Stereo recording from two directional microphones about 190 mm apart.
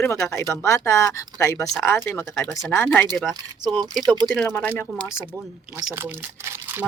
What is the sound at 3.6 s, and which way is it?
Speech, 20° right (ahead or behind).